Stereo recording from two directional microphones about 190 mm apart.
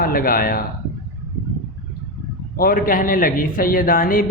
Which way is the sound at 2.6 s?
50° left (ahead or behind).